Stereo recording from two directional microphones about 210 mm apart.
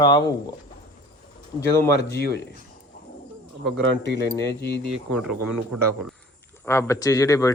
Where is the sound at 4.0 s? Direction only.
55° left (ahead or behind).